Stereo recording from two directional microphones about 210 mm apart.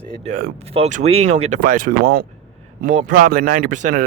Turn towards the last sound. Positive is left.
turn(degrees=-35)  # may be behind; listen again after turning